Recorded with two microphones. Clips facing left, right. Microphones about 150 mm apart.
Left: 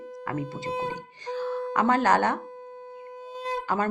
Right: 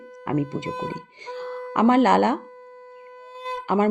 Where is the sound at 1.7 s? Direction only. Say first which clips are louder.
Right 6 dB; 20° right (ahead or behind).